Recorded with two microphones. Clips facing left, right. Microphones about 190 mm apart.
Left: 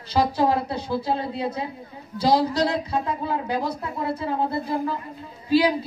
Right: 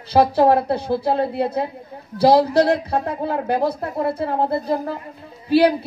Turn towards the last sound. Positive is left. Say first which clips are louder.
# right 4 dB
turn(degrees=-65)  # may be behind; listen again after turning